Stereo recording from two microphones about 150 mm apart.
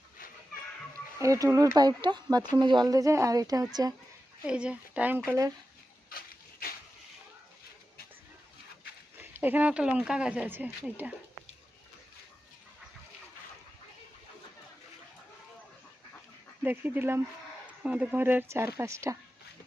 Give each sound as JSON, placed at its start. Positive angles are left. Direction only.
{"t": 1.2, "sound": "speech", "side_deg": -20}
{"t": 4.4, "sound": "speech", "side_deg": -5}
{"t": 5.3, "sound": "speech", "side_deg": -20}
{"t": 9.4, "sound": "speech", "side_deg": -10}
{"t": 16.6, "sound": "speech", "side_deg": -15}